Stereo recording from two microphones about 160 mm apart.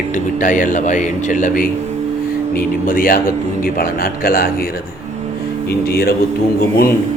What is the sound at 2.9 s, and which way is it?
Speech, 60° left (ahead or behind).